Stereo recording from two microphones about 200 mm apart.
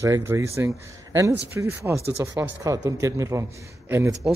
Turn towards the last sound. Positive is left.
turn(degrees=-10)  # may be behind; listen again after turning